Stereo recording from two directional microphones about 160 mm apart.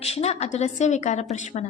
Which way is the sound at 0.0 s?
40° left (ahead or behind).